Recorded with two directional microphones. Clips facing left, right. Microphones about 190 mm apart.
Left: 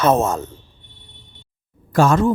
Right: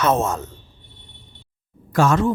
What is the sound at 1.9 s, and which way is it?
Speech, 35° left (ahead or behind).